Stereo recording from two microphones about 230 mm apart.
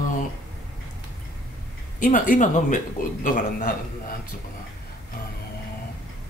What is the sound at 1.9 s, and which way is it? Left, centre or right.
Speech, left.